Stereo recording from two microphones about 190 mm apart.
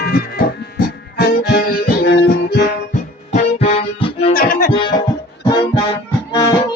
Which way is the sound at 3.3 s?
35° left (ahead or behind).